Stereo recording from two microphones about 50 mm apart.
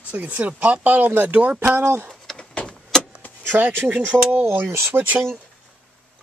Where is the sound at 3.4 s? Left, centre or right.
Right.